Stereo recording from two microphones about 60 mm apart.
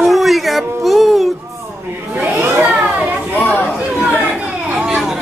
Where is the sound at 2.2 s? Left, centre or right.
Right.